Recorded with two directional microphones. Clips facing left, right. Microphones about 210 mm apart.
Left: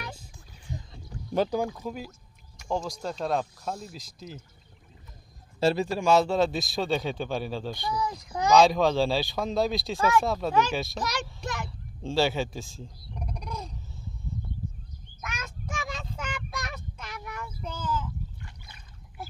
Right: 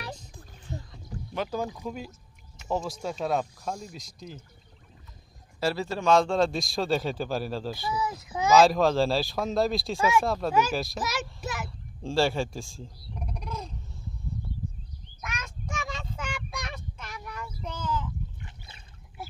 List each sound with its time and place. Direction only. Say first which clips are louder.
1.1 s rowboat: right 3 dB; 35° right (ahead or behind)
1.8 s speech: even; centre (ahead or behind)
5.6 s speech: left 4 dB; 20° left (ahead or behind); by 10.1 s centre (ahead or behind)
10.2 s a sound: even; centre (ahead or behind)
15.2 s child singing: even; centre (ahead or behind)
17.7 s a sound: even; 5° left (ahead or behind)